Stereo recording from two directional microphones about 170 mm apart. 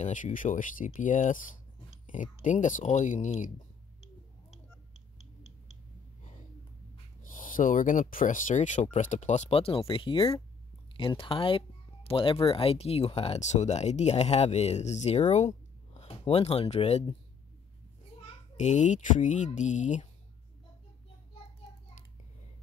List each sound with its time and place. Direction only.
0.0 s speech: 50° left (ahead or behind)
1.9 s a sound: 50° left (ahead or behind)
2.3 s speech: 45° left (ahead or behind)
7.2 s speech: 50° left (ahead or behind)
18.2 s a child's voice: 45° left (ahead or behind)